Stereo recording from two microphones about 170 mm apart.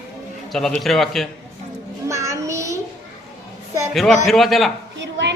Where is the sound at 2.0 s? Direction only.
20° right (ahead or behind).